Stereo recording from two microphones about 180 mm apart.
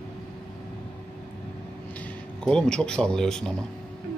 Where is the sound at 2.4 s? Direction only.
5° left (ahead or behind).